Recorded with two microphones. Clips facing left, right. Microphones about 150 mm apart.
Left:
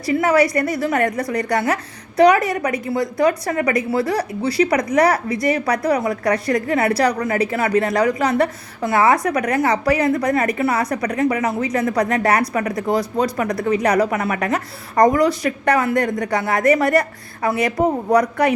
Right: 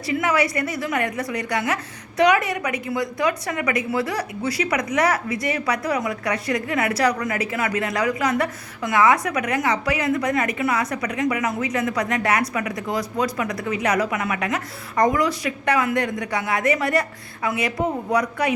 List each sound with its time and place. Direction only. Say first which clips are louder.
0.0 s a woman's voice: left 5 dB; 35° left (ahead or behind)